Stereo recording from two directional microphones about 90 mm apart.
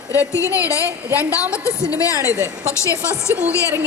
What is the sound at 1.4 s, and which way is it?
Speech, 15° right (ahead or behind).